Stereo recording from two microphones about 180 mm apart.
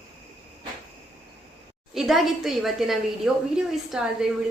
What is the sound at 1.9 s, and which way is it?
A woman's voice, centre (ahead or behind).